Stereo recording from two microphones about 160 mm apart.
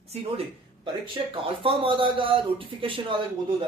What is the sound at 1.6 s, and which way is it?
Speech, 35° right (ahead or behind).